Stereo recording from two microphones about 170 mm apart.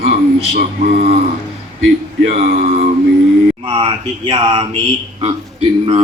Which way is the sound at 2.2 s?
45° right (ahead or behind).